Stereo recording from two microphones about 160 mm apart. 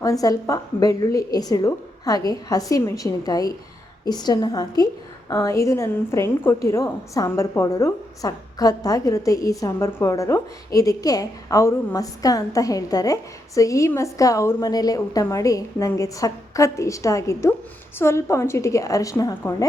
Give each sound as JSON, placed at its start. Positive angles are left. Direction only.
{"t": 0.0, "sound": "a woman's voice", "side_deg": 20}